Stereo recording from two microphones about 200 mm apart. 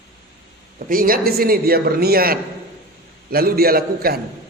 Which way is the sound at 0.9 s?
45° right (ahead or behind).